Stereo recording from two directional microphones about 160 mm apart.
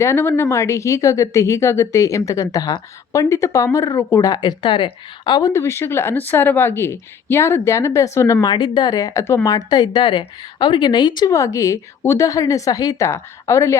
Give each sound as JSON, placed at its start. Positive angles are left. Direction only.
{"t": 0.0, "sound": "a woman's voice", "side_deg": 15}
{"t": 5.5, "sound": "a woman's voice", "side_deg": 15}